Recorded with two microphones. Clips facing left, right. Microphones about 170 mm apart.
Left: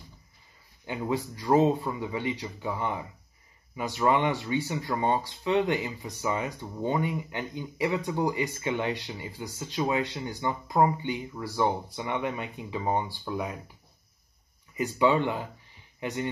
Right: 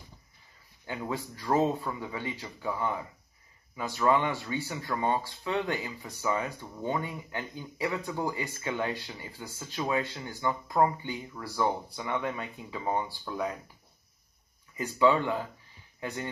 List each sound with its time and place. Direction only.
0.8 s speech: 20° left (ahead or behind)
14.8 s speech: 20° left (ahead or behind)